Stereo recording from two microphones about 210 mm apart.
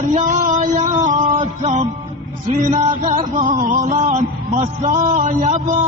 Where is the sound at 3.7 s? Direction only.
35° right (ahead or behind).